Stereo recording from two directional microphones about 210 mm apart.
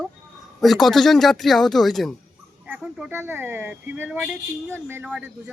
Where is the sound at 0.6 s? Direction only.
Centre (ahead or behind).